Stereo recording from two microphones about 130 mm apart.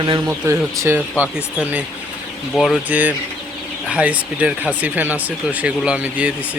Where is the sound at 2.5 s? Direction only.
Centre (ahead or behind).